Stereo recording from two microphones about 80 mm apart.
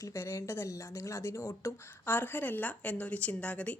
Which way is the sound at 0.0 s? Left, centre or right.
Left.